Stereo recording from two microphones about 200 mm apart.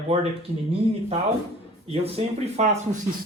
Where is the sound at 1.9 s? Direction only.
30° right (ahead or behind).